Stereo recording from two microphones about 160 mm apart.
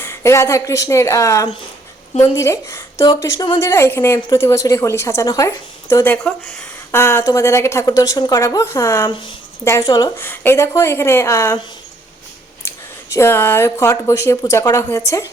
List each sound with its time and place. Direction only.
0.0 s a woman's voice: 20° left (ahead or behind)
12.6 s speech: 15° left (ahead or behind)